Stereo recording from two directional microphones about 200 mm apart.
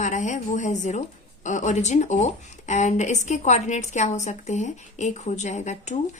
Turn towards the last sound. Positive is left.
turn(degrees=35)  # may be behind; listen again after turning